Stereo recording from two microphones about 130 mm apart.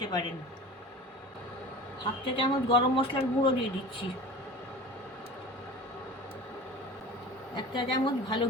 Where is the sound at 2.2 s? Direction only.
40° left (ahead or behind).